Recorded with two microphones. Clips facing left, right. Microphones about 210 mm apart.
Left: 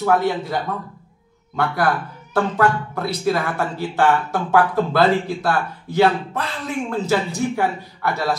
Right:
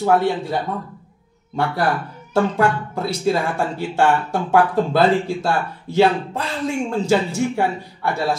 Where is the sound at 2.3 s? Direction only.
25° right (ahead or behind).